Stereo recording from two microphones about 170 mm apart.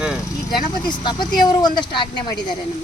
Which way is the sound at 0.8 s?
25° left (ahead or behind).